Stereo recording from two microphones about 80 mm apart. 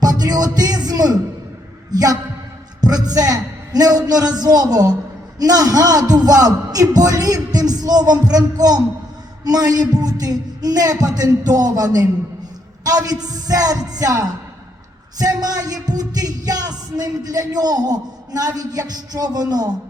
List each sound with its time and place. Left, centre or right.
0.0 s music: right
1.9 s speech: right
2.8 s music: right